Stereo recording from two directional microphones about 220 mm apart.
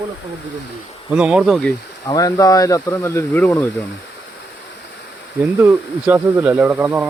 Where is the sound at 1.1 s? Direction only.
5° right (ahead or behind).